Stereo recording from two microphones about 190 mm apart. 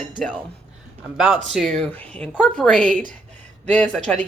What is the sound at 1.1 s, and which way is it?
Speech, 10° right (ahead or behind).